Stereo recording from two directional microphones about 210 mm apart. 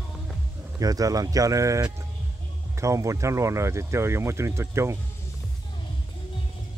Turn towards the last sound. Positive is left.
turn(degrees=-15)  # may be behind; listen again after turning